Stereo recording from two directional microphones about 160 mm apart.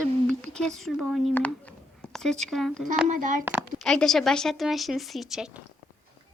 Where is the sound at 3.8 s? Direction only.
5° left (ahead or behind).